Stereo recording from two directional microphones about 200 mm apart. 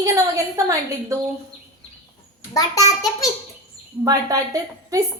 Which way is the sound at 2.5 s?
15° left (ahead or behind).